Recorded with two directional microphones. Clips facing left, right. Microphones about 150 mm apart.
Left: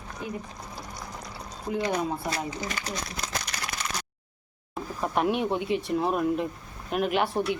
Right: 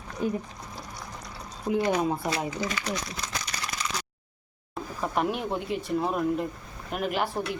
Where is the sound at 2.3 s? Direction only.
45° left (ahead or behind).